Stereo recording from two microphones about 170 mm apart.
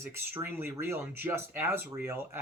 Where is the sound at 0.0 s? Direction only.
15° right (ahead or behind).